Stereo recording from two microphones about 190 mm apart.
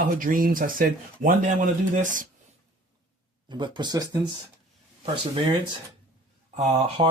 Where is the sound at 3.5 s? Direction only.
25° right (ahead or behind).